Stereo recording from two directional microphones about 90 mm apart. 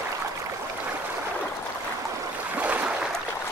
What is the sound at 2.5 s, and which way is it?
Boat, 15° right (ahead or behind).